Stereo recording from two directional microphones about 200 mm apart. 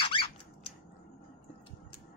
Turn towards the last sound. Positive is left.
turn(degrees=25)  # may be behind; listen again after turning